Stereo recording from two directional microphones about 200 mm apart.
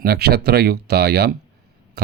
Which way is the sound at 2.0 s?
55° right (ahead or behind).